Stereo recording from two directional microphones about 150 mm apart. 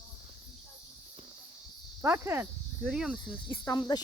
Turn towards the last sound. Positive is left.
turn(degrees=25)  # may be behind; listen again after turning